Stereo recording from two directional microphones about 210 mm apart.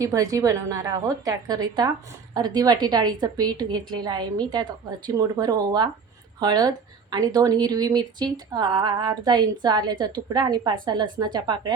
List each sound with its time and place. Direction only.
0.0 s a woman's voice: 15° right (ahead or behind)